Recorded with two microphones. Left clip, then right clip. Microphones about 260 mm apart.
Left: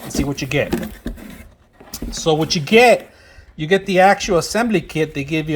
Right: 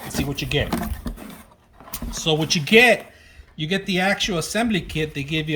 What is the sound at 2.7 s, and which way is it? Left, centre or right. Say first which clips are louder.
Speech: left 3 dB; centre.